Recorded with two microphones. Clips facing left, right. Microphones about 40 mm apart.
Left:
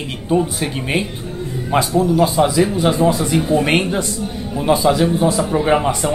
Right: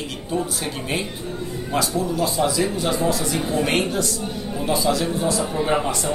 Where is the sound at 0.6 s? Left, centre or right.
Left.